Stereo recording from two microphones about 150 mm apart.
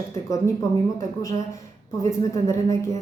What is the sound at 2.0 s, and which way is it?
Speech, 20° left (ahead or behind).